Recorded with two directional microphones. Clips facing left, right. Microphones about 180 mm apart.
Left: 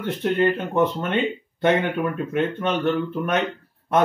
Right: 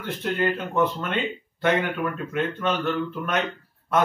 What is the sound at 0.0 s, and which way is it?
Speech, 25° left (ahead or behind).